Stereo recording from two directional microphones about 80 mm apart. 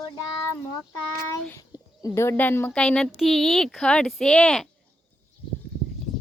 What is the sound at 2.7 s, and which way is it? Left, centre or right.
Speech, centre.